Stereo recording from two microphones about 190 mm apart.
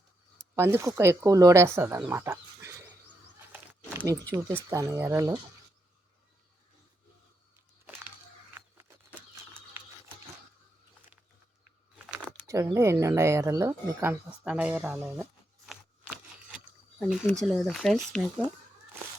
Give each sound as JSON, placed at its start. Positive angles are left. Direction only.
{"t": 0.5, "sound": "speech", "side_deg": -15}
{"t": 3.9, "sound": "speech", "side_deg": -15}
{"t": 8.5, "sound": "bird", "side_deg": -10}
{"t": 12.5, "sound": "speech", "side_deg": -15}